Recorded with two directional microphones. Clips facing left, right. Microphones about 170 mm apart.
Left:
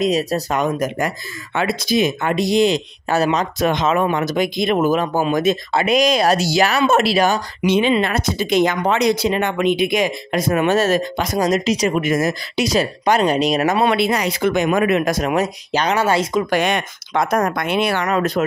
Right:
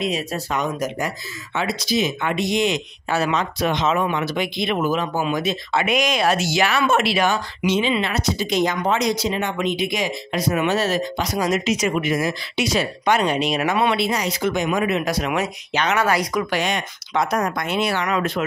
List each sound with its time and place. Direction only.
0.0 s speech: 40° left (ahead or behind)
0.6 s speech: 50° left (ahead or behind)
7.6 s speech: 55° left (ahead or behind); by 12.0 s 35° left (ahead or behind)
12.0 s speech: 45° left (ahead or behind)
13.9 s speech: 60° left (ahead or behind); by 16.4 s 25° left (ahead or behind)
16.4 s speech: 55° left (ahead or behind)
18.0 s speech: 40° left (ahead or behind)